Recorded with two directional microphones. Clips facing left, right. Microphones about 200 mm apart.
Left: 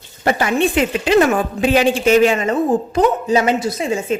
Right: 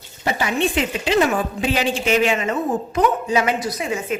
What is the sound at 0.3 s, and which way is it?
Speech, 55° left (ahead or behind).